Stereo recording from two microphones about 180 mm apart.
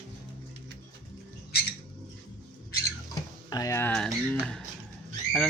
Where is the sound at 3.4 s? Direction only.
20° left (ahead or behind).